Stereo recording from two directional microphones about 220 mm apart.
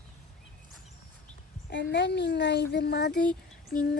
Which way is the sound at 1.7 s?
50° left (ahead or behind).